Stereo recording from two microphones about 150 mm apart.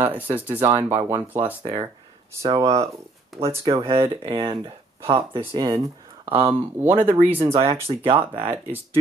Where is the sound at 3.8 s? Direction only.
35° right (ahead or behind).